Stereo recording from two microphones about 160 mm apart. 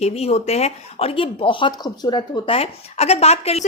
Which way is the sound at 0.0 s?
40° left (ahead or behind).